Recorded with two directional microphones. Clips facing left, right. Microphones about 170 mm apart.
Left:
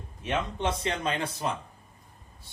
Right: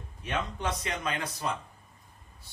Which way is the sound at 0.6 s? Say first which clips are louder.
Left 4 dB; 30° left (ahead or behind).